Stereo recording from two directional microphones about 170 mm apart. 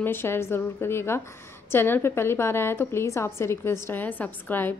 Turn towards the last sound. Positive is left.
turn(degrees=10)  # may be behind; listen again after turning